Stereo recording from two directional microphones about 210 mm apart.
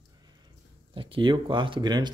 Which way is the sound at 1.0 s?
25° right (ahead or behind).